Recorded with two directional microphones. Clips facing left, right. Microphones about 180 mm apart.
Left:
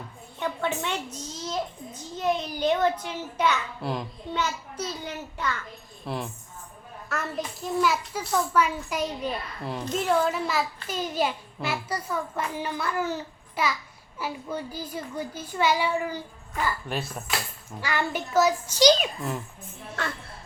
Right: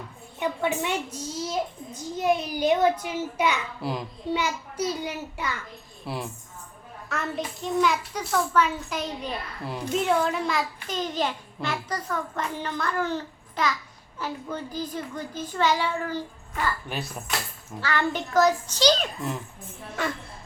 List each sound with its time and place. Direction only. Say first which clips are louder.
0.3 s a child's voice: right 2 dB; 10° right (ahead or behind); by 9.3 s 10° left (ahead or behind)
9.6 s a child's voice: right 1 dB; 10° right (ahead or behind); by 16.2 s 10° left (ahead or behind)
16.9 s a child's voice: left 2 dB; centre (ahead or behind)
17.7 s a child's voice: right 2 dB; 10° left (ahead or behind)